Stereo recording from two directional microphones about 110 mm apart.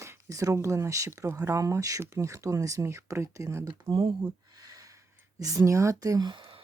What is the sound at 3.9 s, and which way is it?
Speech, 50° right (ahead or behind).